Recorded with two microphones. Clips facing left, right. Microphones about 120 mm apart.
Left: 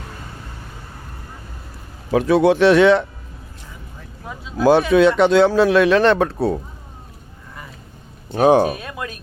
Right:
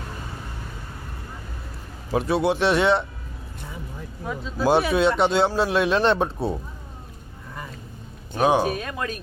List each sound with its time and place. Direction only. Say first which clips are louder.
2.1 s speech: left 7 dB; 90° left
4.3 s speech: even; 5° left (ahead or behind)
4.6 s speech: left 6 dB; 90° left
8.4 s speech: left 6 dB; 40° left (ahead or behind)
8.6 s speech: left 2 dB; 15° left (ahead or behind)